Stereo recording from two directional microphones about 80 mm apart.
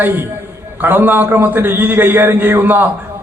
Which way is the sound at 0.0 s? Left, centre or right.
Right.